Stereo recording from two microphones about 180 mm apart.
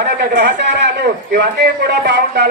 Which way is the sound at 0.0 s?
60° right (ahead or behind).